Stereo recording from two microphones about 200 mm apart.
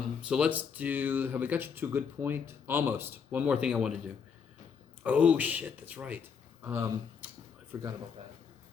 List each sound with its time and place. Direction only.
0.2 s a man's voice: 5° right (ahead or behind)